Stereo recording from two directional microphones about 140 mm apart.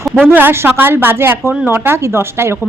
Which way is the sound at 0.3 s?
15° right (ahead or behind).